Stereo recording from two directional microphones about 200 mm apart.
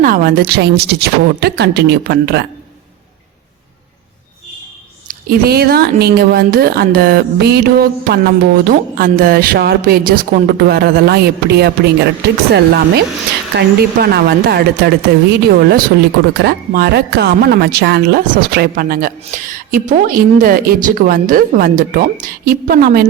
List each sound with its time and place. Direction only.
0.0 s speech: 50° right (ahead or behind)
5.0 s speech: 50° right (ahead or behind)